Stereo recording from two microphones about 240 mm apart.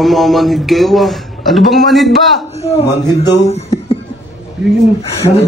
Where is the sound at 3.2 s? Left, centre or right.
Left.